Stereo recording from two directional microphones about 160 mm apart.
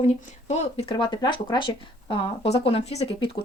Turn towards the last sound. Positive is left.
turn(degrees=30)  # may be behind; listen again after turning